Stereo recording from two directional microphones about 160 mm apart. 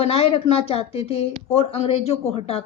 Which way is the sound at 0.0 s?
40° left (ahead or behind).